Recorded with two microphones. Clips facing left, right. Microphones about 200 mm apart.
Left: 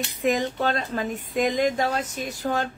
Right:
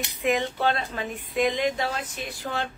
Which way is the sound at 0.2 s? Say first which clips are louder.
Left 1 dB; 40° left (ahead or behind).